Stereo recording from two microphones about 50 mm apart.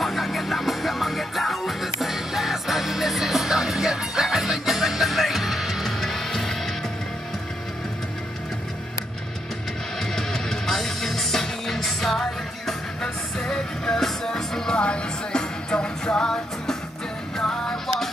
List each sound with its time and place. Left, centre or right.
0.0 s music: centre
9.9 s music: centre
17.8 s music: centre